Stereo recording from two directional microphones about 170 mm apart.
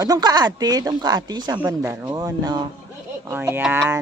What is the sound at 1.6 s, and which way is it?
Speech, 10° right (ahead or behind).